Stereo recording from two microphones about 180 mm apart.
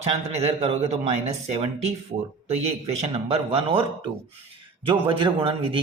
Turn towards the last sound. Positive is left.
turn(degrees=-30)  # may be behind; listen again after turning